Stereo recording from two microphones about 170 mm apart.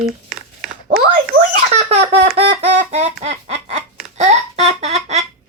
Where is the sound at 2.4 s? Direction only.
35° right (ahead or behind).